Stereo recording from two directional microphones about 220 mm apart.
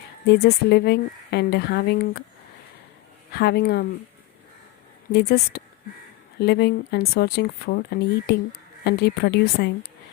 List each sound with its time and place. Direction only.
0.3 s speech: 45° left (ahead or behind)
3.3 s speech: 45° left (ahead or behind)
5.1 s speech: 45° left (ahead or behind)